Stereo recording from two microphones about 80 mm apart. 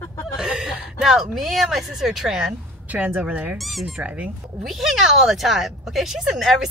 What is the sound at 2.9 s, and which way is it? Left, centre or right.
Speech, centre.